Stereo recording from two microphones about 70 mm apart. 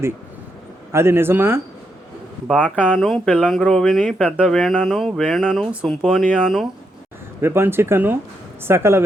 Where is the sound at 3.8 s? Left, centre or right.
Centre.